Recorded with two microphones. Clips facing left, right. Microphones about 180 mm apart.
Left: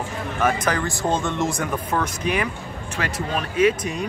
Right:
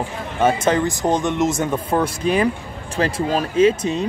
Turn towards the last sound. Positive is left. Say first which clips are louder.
# right 4 dB
turn(degrees=-25)  # may be behind; listen again after turning